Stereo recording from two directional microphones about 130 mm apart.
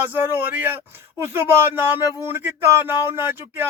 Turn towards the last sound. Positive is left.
turn(degrees=-15)  # may be behind; listen again after turning